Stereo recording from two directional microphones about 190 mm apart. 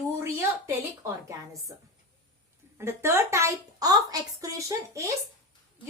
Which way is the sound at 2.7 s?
15° right (ahead or behind).